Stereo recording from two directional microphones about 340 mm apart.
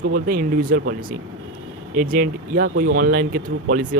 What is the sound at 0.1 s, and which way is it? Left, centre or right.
Speech, right.